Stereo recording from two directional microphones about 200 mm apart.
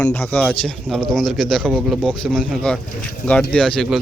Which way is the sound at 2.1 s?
5° left (ahead or behind).